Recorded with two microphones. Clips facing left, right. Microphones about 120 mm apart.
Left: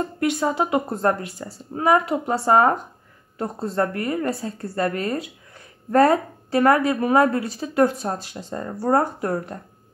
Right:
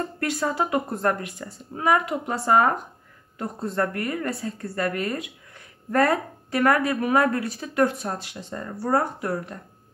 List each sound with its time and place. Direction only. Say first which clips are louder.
0.2 s speech: left 4 dB; 20° left (ahead or behind); by 9.6 s 40° left (ahead or behind)